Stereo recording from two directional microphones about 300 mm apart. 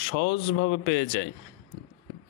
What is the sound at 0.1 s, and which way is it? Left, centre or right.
Speech, left.